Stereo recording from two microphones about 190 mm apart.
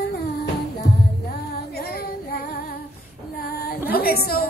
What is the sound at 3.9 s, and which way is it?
Speech, 55° left (ahead or behind).